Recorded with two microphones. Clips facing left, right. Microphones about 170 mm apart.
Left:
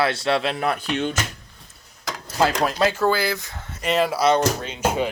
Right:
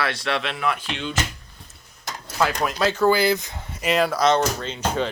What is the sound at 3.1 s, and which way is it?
Speech, 20° right (ahead or behind).